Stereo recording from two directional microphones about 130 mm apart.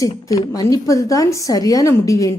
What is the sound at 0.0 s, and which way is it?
Speech, 25° left (ahead or behind).